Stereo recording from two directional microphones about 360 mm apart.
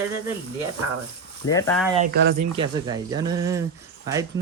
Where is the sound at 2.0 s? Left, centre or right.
Right.